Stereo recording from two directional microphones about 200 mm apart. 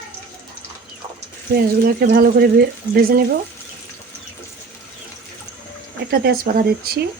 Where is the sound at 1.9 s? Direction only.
45° right (ahead or behind).